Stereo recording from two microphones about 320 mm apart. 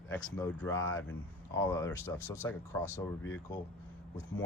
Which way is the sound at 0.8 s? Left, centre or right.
Left.